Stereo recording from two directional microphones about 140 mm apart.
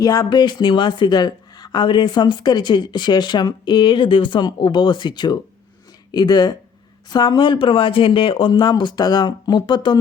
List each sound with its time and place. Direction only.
0.0 s speech: 25° left (ahead or behind)